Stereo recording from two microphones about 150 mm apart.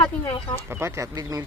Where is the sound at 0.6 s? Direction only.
15° right (ahead or behind).